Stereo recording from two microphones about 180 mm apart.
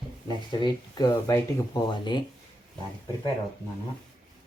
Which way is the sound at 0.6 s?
20° left (ahead or behind).